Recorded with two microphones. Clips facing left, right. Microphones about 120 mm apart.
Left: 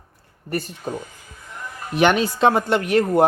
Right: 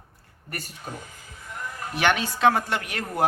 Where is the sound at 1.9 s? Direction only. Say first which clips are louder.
Left 7 dB; 30° left (ahead or behind).